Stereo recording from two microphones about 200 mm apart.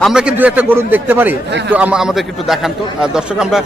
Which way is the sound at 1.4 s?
60° right (ahead or behind).